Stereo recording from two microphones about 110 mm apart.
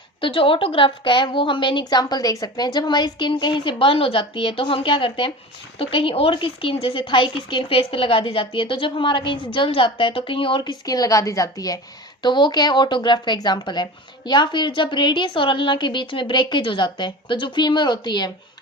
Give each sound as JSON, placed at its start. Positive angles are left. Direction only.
{"t": 0.2, "sound": "a woman's voice", "side_deg": 50}
{"t": 12.2, "sound": "a woman's voice", "side_deg": 45}